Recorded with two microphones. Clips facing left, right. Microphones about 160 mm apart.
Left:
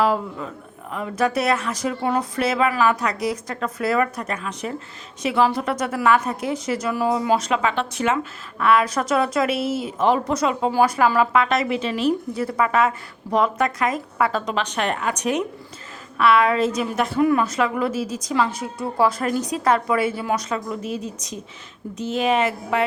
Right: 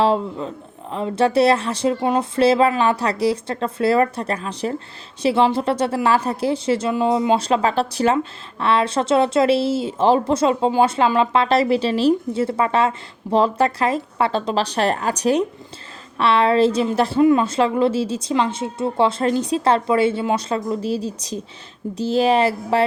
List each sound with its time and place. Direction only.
0.0 s a woman's voice: 25° right (ahead or behind)